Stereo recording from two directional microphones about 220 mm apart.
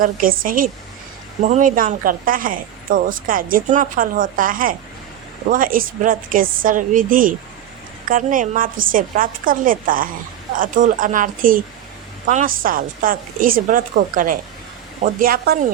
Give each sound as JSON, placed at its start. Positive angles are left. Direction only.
{"t": 0.0, "sound": "a woman's voice", "side_deg": -40}